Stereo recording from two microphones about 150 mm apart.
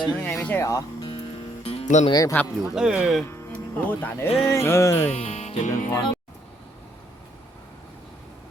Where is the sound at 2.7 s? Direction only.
5° right (ahead or behind).